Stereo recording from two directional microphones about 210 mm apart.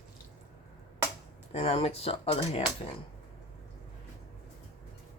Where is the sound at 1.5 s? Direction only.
25° left (ahead or behind).